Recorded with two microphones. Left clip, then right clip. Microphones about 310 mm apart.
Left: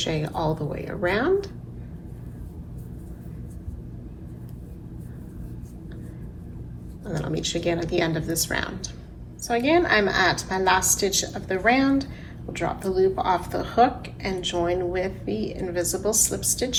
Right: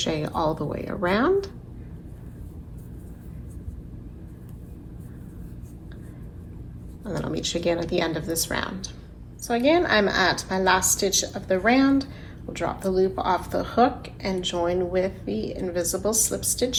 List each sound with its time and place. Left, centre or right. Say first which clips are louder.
0.0 s a woman's voice: right 1 dB; centre
7.0 s a woman's voice: even; centre